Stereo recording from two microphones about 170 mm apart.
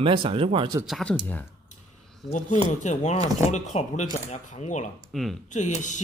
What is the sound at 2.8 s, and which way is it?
Speech, 45° left (ahead or behind).